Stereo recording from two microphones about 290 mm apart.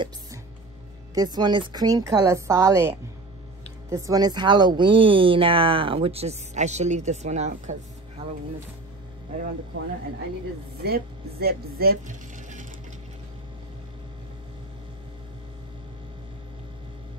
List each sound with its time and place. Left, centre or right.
1.1 s a woman's voice: centre
10.8 s speech: right